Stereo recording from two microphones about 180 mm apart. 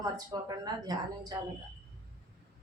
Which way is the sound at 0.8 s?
20° right (ahead or behind).